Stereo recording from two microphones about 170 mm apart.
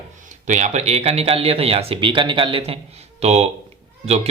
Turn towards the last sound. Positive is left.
turn(degrees=-40)  # may be behind; listen again after turning